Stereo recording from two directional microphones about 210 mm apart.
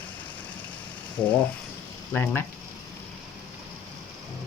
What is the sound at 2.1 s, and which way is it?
Speech, 10° left (ahead or behind).